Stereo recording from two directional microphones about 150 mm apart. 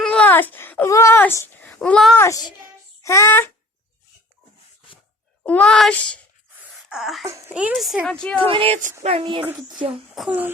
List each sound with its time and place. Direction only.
0.0 s a sound: 10° left (ahead or behind)
2.1 s a child's voice: 20° left (ahead or behind)
5.4 s a woman's voice: 5° left (ahead or behind)
7.3 s a woman's voice: 20° right (ahead or behind)
7.5 s a woman's voice: 5° right (ahead or behind)
8.4 s speech: 35° right (ahead or behind)
10.2 s speech: 10° right (ahead or behind)